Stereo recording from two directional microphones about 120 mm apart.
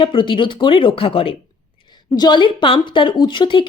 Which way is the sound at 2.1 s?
40° left (ahead or behind).